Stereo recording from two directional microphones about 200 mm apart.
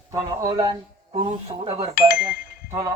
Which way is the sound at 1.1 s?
30° right (ahead or behind).